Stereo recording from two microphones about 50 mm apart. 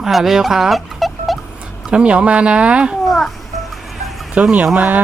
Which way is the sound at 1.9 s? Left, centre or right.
Right.